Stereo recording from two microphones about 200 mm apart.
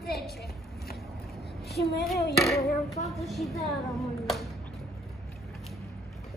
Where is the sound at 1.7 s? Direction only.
Centre (ahead or behind).